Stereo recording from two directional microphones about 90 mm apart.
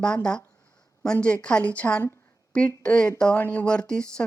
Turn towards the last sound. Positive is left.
turn(degrees=10)  # may be behind; listen again after turning